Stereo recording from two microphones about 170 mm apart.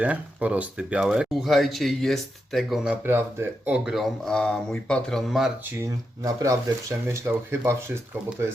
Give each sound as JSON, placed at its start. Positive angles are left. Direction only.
{"t": 0.0, "sound": "speech", "side_deg": -10}
{"t": 3.8, "sound": "speech", "side_deg": 0}
{"t": 5.8, "sound": "speech", "side_deg": -20}